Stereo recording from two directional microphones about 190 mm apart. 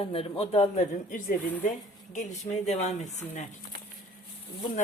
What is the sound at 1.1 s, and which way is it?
Speech, 45° left (ahead or behind).